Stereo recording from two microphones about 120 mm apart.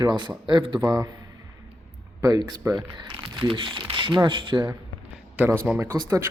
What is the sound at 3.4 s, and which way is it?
Speech, 45° right (ahead or behind).